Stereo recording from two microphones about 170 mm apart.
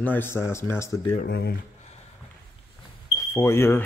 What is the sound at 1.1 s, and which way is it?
Speech, 65° left (ahead or behind).